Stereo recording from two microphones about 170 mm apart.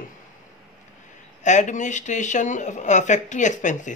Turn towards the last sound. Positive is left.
turn(degrees=50)  # may be behind; listen again after turning